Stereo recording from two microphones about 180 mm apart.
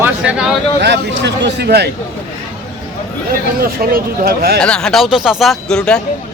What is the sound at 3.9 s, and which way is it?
Speech, 55° right (ahead or behind).